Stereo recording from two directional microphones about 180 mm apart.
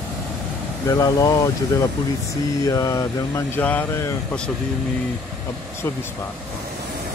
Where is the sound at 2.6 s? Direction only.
20° left (ahead or behind).